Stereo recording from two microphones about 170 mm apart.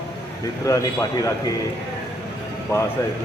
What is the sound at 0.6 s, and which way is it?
Speech, 20° left (ahead or behind).